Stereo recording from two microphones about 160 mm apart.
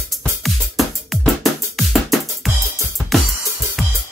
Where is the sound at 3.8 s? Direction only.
Centre (ahead or behind).